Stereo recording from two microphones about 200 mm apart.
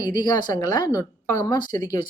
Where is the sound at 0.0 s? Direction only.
20° left (ahead or behind).